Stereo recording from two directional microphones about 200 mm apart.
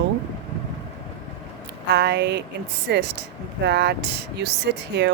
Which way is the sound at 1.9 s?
55° right (ahead or behind).